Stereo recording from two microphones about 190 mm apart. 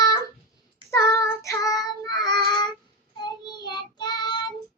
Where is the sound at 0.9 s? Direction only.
15° left (ahead or behind).